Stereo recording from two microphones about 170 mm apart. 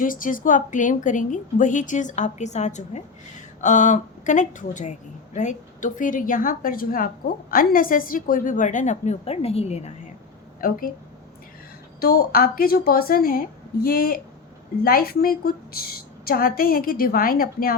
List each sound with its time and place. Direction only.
0.0 s speech: 50° left (ahead or behind)
10.6 s a woman's voice: 55° left (ahead or behind)
11.9 s a woman's voice: 60° left (ahead or behind)